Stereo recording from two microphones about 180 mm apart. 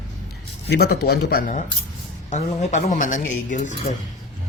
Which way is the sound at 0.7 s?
60° left (ahead or behind).